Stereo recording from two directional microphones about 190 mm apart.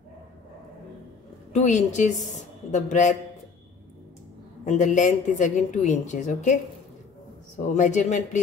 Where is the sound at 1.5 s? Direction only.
40° left (ahead or behind).